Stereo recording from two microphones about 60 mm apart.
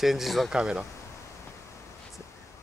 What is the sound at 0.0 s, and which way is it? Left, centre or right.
Speech, centre.